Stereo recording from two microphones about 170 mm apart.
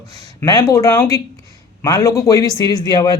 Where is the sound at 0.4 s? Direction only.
20° left (ahead or behind).